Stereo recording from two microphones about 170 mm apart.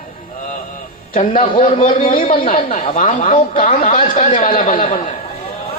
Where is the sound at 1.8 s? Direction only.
50° left (ahead or behind).